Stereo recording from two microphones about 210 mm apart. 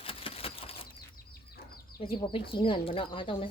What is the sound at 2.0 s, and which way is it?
Speech, 25° left (ahead or behind).